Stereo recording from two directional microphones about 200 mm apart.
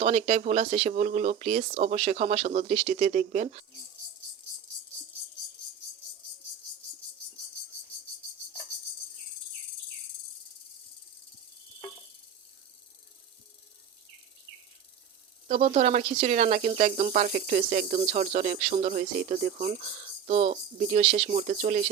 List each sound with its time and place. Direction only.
0.0 s speech: 30° right (ahead or behind)
15.4 s speech: 30° right (ahead or behind)